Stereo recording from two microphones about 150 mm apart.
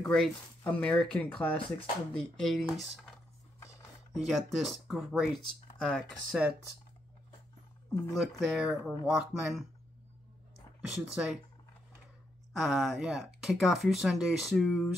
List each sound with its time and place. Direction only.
0.0 s speech: 5° left (ahead or behind)
3.5 s music: 20° left (ahead or behind)
4.1 s speech: centre (ahead or behind)
8.2 s speech: centre (ahead or behind)
10.9 s speech: 5° right (ahead or behind)
12.5 s speech: centre (ahead or behind)